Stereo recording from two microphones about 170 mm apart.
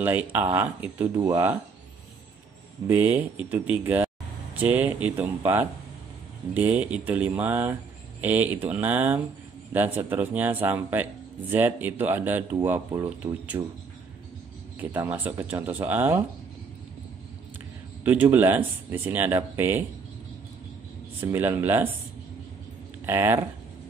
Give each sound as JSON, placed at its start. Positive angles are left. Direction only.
{"t": 0.0, "sound": "speech", "side_deg": -10}
{"t": 2.9, "sound": "speech", "side_deg": -10}
{"t": 14.8, "sound": "speech", "side_deg": -10}
{"t": 18.0, "sound": "speech", "side_deg": -10}
{"t": 21.2, "sound": "speech", "side_deg": -15}
{"t": 23.0, "sound": "speech", "side_deg": -15}